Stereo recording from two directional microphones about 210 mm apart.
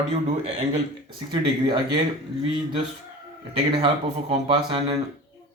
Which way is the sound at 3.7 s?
25° right (ahead or behind).